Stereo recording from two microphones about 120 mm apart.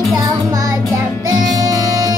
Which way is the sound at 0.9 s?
25° right (ahead or behind).